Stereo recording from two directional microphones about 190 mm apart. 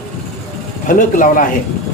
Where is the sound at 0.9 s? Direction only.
45° left (ahead or behind).